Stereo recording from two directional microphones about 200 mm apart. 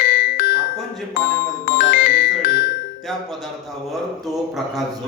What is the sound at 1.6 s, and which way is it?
Music, 45° left (ahead or behind).